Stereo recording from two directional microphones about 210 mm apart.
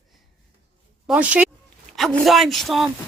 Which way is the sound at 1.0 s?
5° right (ahead or behind).